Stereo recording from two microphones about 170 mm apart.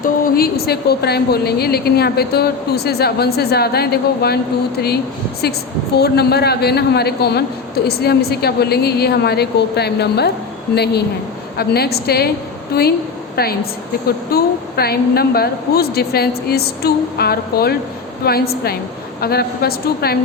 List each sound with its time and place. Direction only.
0.0 s a woman's voice: 60° left (ahead or behind)
6.0 s a woman's voice: 70° left (ahead or behind)
11.5 s a woman's voice: 70° left (ahead or behind)